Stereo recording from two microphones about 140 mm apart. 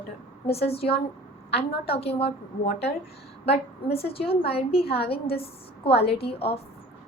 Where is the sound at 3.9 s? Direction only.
45° left (ahead or behind).